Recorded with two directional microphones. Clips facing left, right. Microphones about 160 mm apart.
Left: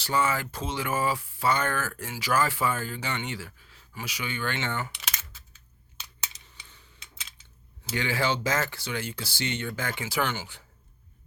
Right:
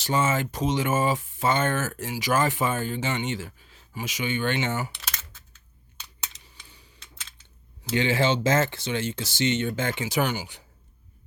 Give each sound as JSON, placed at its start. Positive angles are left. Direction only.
{"t": 0.0, "sound": "speech", "side_deg": -20}
{"t": 6.5, "sound": "a sound", "side_deg": -10}
{"t": 7.9, "sound": "speech", "side_deg": -20}